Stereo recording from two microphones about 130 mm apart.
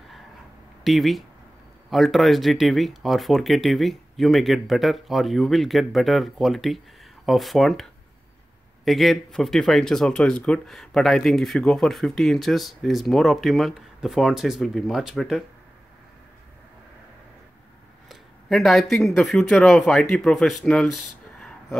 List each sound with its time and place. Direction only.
0.8 s speech: centre (ahead or behind)
18.0 s speech: centre (ahead or behind)